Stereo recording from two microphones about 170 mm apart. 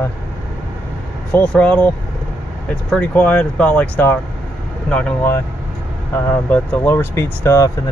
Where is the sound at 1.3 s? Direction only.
5° left (ahead or behind).